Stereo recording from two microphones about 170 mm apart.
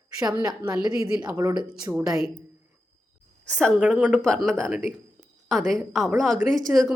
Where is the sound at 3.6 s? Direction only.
5° left (ahead or behind).